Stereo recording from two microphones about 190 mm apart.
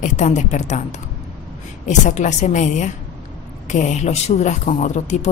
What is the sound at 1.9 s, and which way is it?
Speech, 40° left (ahead or behind).